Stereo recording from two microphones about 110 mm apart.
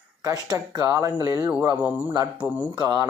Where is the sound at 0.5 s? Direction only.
30° right (ahead or behind).